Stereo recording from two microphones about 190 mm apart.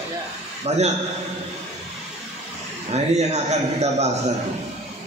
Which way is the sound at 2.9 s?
35° right (ahead or behind).